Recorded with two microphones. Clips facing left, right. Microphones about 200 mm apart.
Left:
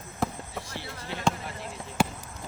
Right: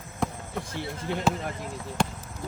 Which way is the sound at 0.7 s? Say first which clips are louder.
Right 6 dB; 50° right (ahead or behind).